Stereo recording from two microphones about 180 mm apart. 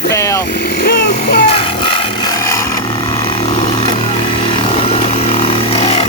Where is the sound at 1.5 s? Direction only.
30° left (ahead or behind).